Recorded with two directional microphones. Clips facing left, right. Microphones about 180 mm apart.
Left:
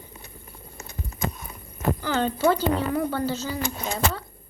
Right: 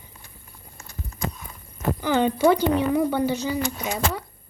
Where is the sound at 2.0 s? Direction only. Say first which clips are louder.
Right 6 dB; 15° right (ahead or behind).